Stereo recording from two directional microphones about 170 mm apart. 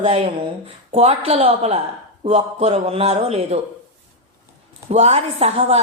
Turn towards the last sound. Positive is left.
turn(degrees=-35)  # may be behind; listen again after turning